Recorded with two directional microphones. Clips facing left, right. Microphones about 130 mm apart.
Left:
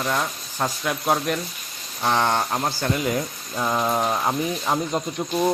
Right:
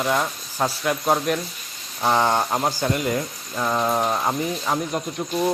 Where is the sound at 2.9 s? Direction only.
Centre (ahead or behind).